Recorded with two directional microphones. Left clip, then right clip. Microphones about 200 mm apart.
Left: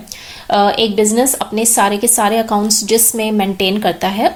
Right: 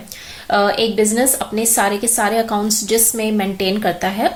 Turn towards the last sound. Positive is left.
turn(degrees=30)  # may be behind; listen again after turning